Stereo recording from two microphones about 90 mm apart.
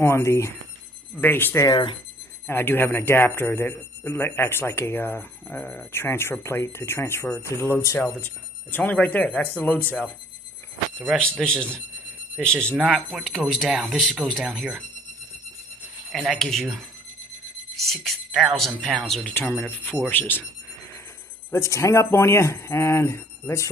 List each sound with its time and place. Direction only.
0.0 s speech: 30° left (ahead or behind)
11.4 s speech: 10° left (ahead or behind)
16.1 s speech: centre (ahead or behind)
17.8 s speech: centre (ahead or behind)
19.2 s speech: 20° left (ahead or behind)
21.5 s speech: 35° left (ahead or behind)